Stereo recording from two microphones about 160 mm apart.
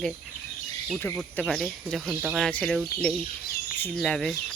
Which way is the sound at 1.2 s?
5° left (ahead or behind).